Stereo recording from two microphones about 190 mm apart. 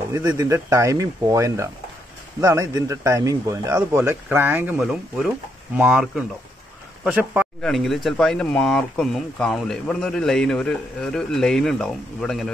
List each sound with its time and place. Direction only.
0.1 s speech: 20° right (ahead or behind); by 12.4 s centre (ahead or behind)